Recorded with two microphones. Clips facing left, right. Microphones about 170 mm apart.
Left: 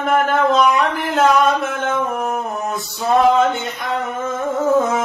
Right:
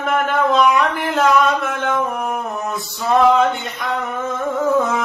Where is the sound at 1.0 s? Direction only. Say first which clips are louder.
Left 2 dB; centre (ahead or behind).